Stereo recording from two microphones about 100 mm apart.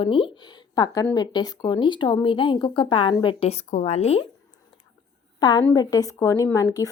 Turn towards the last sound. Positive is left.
turn(degrees=35)  # may be behind; listen again after turning